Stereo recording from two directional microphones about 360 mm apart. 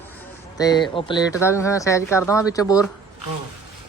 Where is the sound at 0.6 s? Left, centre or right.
Centre.